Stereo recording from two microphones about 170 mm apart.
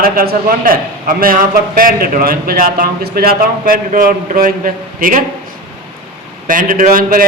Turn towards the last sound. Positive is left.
turn(degrees=-55)  # may be behind; listen again after turning